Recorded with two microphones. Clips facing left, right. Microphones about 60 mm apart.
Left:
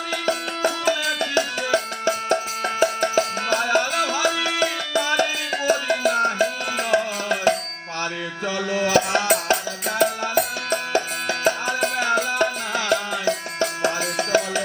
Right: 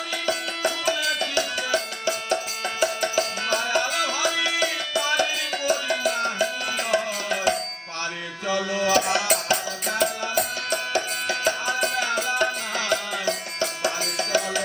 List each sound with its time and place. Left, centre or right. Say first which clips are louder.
0.3 s music: left 3 dB; left
9.1 s music: left 3 dB; left